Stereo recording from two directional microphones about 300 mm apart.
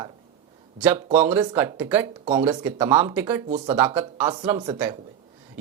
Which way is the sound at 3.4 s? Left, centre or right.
Right.